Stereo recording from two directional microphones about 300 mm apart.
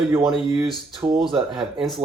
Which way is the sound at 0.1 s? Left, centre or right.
Centre.